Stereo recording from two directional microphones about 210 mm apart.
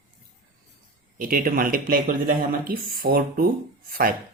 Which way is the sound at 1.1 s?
40° right (ahead or behind).